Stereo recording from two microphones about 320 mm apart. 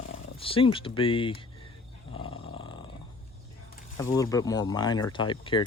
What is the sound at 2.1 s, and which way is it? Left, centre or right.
Roar, centre.